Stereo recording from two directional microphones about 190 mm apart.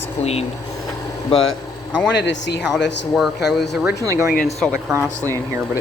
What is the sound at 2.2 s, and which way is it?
Speech, 65° left (ahead or behind).